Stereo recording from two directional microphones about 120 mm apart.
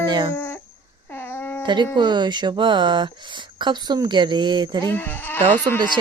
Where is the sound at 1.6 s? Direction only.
40° right (ahead or behind).